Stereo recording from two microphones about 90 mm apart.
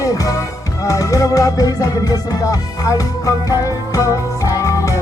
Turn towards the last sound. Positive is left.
turn(degrees=35)  # may be behind; listen again after turning